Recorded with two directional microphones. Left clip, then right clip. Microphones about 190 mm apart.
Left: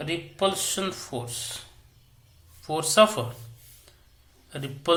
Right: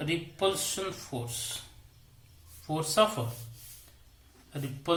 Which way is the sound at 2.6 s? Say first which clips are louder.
Left 7 dB; 20° left (ahead or behind).